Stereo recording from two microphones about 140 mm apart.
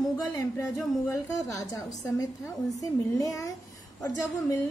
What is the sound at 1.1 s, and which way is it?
A woman's voice, 20° left (ahead or behind).